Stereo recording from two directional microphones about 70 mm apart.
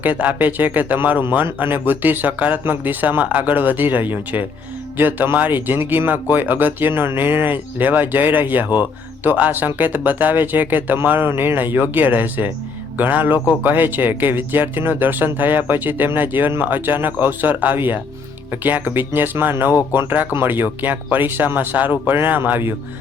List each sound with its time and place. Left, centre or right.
0.0 s speech: right